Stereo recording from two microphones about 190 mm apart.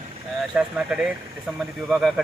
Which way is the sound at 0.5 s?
5° right (ahead or behind).